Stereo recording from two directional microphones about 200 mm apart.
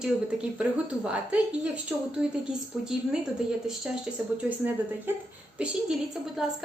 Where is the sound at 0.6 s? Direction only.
5° right (ahead or behind).